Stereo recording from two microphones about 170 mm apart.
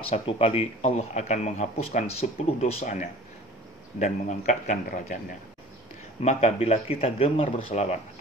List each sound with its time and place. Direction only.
0.1 s speech: 35° left (ahead or behind)
4.0 s a man's voice: 45° left (ahead or behind)
6.2 s speech: 35° left (ahead or behind)